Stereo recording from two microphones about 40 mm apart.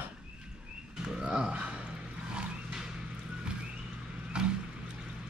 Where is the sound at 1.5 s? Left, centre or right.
Right.